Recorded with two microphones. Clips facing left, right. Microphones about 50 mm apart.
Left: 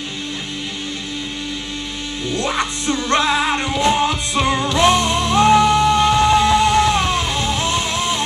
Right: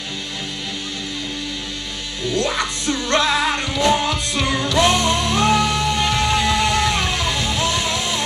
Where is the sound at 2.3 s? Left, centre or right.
Left.